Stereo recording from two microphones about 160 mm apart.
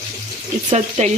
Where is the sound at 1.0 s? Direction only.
45° right (ahead or behind).